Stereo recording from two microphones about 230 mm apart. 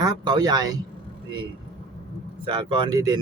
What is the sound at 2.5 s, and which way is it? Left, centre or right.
Speech, right.